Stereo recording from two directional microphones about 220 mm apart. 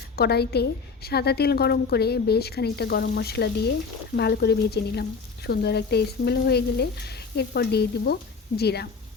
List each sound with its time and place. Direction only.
0.2 s speech: 45° left (ahead or behind)